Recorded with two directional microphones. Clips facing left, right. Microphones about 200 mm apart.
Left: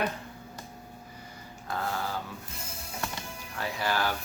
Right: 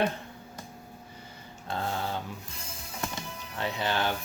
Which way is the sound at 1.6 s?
25° right (ahead or behind).